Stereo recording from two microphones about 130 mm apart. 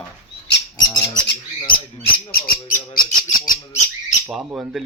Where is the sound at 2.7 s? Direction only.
90° left.